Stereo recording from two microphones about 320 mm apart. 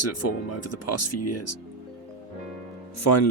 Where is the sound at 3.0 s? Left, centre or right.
Left.